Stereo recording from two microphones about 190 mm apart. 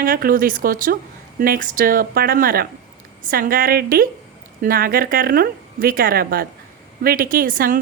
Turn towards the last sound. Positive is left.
turn(degrees=-45)  # may be behind; listen again after turning